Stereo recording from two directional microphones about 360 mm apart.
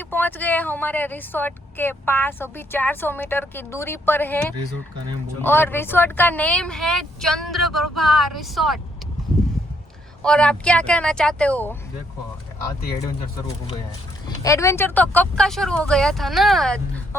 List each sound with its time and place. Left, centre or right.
0.0 s speech: centre
7.7 s a sound: right
8.4 s speech: centre
10.2 s speech: centre
14.3 s speech: centre